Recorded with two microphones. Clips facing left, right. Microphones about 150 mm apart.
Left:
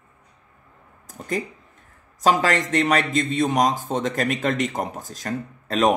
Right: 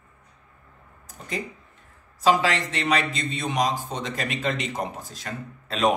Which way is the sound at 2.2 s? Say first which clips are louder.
Left 2 dB; 45° left (ahead or behind).